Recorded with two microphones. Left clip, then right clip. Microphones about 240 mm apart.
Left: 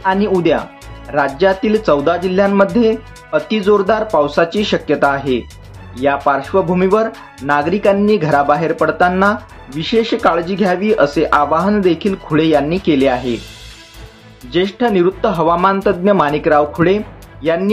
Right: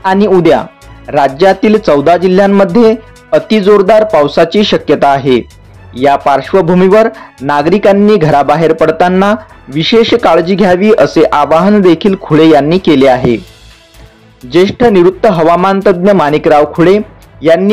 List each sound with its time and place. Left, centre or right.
0.0 s speech: right
14.5 s a man's voice: right